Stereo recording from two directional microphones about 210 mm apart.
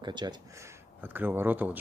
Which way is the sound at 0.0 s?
20° right (ahead or behind).